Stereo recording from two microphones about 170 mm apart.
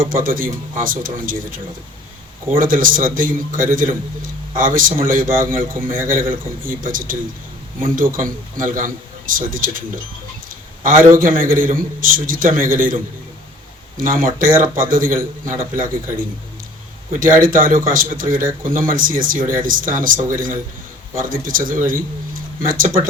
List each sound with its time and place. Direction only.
0.0 s a man's voice: 55° right (ahead or behind)